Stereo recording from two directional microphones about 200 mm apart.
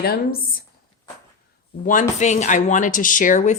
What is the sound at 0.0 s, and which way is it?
Speech, 50° left (ahead or behind).